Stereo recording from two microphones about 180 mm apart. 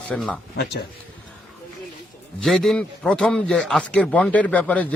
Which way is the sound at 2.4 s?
Centre (ahead or behind).